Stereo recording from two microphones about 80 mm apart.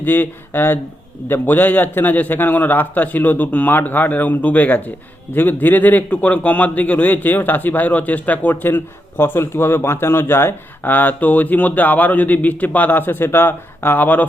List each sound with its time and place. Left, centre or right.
0.0 s a man's voice: left